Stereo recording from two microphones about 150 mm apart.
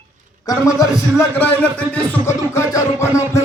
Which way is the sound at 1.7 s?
10° left (ahead or behind).